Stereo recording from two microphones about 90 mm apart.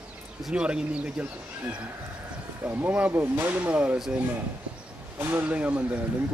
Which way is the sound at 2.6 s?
20° right (ahead or behind).